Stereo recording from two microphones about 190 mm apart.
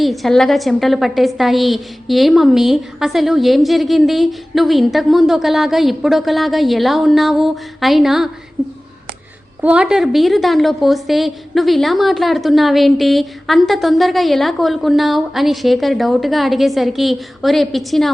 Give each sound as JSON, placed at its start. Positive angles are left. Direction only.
{"t": 0.0, "sound": "a woman's voice", "side_deg": 0}
{"t": 9.6, "sound": "a woman's voice", "side_deg": -5}